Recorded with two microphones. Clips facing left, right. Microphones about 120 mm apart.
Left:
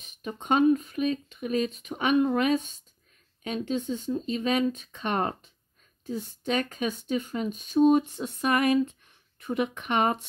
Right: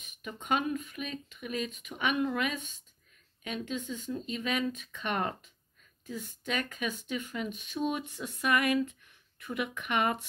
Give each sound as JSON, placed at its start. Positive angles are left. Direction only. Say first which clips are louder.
{"t": 0.0, "sound": "speech", "louder": "left 6 dB", "side_deg": 30}